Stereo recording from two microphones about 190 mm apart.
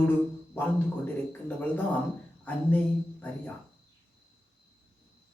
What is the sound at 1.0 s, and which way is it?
Speech, 10° left (ahead or behind).